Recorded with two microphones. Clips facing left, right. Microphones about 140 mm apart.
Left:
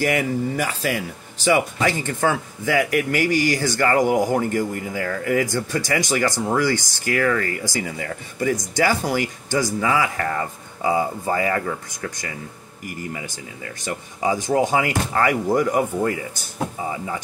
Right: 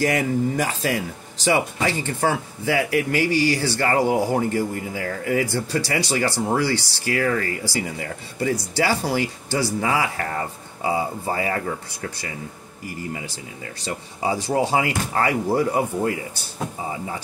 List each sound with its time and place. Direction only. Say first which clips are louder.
0.0 s speech: even; 35° right (ahead or behind)